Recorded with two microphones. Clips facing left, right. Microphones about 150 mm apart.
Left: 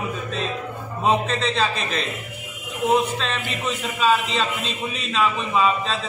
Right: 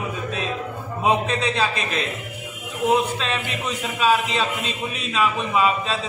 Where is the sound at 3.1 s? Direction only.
5° right (ahead or behind).